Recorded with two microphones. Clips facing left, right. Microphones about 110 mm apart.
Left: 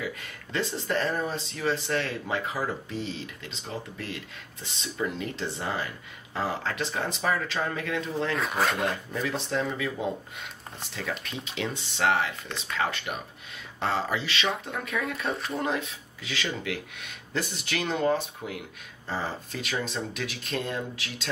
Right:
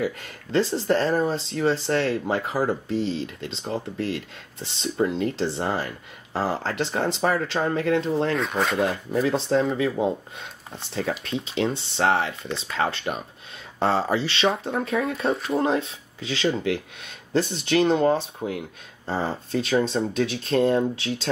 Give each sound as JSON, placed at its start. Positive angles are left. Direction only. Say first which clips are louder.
{"t": 0.0, "sound": "speech", "louder": "right 7 dB", "side_deg": -35}
{"t": 8.4, "sound": "speech", "louder": "right 2 dB", "side_deg": 0}
{"t": 8.7, "sound": "speech", "louder": "right 6 dB", "side_deg": -30}